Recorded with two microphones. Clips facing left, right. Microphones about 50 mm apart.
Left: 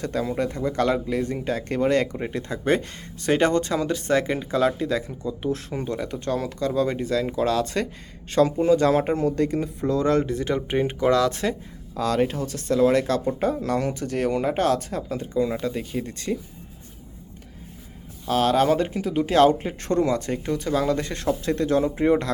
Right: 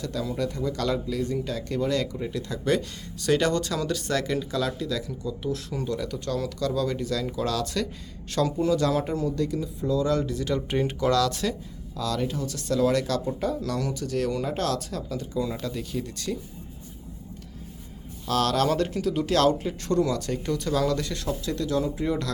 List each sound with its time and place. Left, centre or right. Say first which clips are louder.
0.0 s speech: left 4 dB; left
11.9 s speech: left 6 dB; left
12.5 s speech: left 2 dB; left
18.3 s speech: left 4 dB; left